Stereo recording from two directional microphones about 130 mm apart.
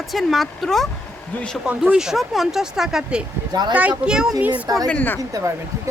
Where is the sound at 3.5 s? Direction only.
30° right (ahead or behind).